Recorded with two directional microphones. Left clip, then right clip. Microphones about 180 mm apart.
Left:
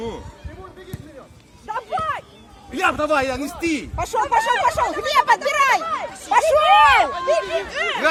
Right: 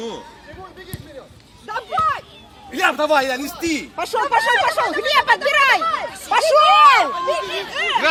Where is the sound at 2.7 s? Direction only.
65° left (ahead or behind).